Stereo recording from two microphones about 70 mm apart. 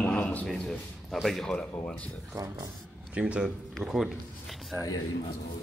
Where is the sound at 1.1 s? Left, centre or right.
Centre.